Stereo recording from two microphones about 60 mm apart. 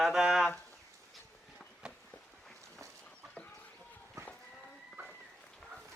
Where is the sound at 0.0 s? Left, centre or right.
Centre.